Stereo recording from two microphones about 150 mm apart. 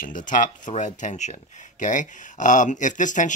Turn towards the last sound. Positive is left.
turn(degrees=55)  # may be behind; listen again after turning